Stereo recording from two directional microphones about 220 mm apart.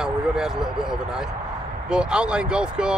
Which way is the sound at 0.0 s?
Centre (ahead or behind).